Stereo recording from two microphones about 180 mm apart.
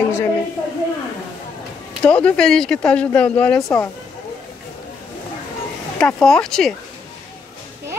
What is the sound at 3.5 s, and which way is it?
Speech, 20° left (ahead or behind).